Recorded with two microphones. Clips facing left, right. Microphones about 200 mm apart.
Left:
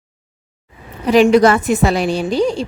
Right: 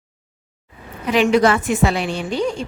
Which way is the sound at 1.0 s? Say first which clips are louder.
Left 5 dB; 40° left (ahead or behind).